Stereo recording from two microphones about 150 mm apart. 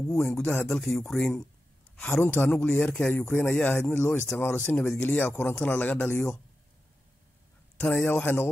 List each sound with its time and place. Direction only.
0.1 s a man's voice: centre (ahead or behind)
7.8 s a man's voice: 10° left (ahead or behind)